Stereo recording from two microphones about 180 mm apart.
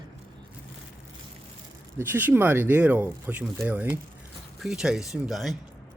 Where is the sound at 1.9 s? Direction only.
10° right (ahead or behind).